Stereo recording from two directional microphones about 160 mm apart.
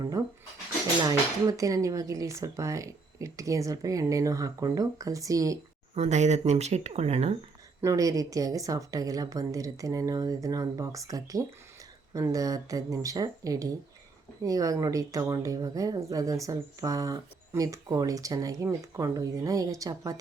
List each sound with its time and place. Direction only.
0.2 s speech: 20° right (ahead or behind)
5.9 s speech: 45° right (ahead or behind)
7.8 s speech: 20° right (ahead or behind)